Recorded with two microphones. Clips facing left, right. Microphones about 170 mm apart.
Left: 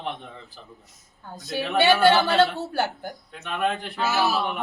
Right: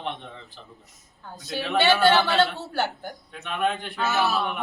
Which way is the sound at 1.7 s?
Centre (ahead or behind).